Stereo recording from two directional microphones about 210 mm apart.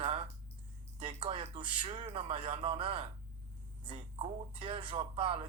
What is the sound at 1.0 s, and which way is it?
Music, 25° right (ahead or behind).